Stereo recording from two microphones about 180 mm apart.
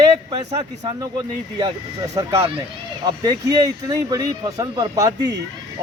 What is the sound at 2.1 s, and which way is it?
Speech, 20° right (ahead or behind).